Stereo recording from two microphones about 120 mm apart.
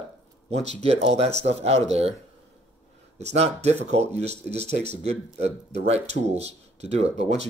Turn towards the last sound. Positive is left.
turn(degrees=-60)  # may be behind; listen again after turning